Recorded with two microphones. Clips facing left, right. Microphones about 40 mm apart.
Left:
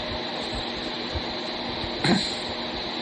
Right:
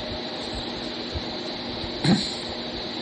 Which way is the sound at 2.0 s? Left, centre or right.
Left.